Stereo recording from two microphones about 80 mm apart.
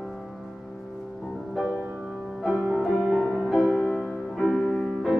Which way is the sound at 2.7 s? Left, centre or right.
Centre.